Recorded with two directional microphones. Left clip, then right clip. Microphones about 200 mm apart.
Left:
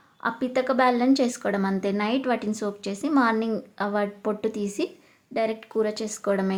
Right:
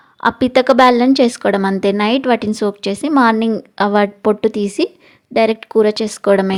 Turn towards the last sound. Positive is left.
turn(degrees=-40)  # may be behind; listen again after turning